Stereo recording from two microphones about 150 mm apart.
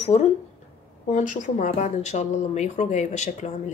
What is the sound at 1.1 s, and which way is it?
Speech, 55° left (ahead or behind).